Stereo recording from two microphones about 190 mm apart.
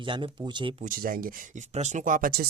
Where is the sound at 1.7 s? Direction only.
40° right (ahead or behind).